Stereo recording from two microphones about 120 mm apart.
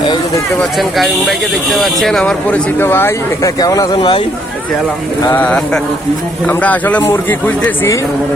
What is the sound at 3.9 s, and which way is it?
Speech, 40° left (ahead or behind).